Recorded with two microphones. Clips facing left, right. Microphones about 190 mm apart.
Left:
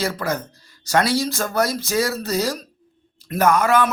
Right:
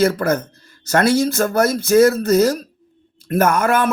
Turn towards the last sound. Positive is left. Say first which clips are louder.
# right 1 dB
turn(degrees=-50)  # may be behind; listen again after turning